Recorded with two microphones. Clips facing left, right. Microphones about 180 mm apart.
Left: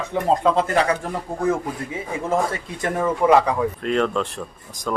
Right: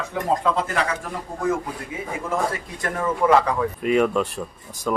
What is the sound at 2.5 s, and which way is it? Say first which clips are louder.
Speech: left 2 dB; 20° left (ahead or behind).